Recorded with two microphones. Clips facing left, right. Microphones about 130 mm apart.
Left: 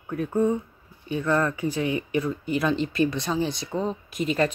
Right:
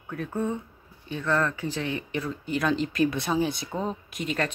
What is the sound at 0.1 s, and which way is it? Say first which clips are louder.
Speech: left 6 dB; 15° left (ahead or behind).